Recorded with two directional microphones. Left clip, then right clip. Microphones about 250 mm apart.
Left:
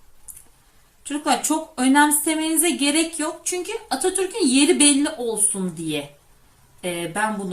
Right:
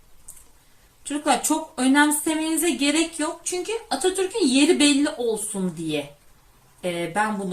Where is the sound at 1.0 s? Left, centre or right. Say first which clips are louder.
Even; centre.